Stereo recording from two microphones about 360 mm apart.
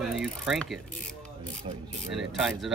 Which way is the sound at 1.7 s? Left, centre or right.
Centre.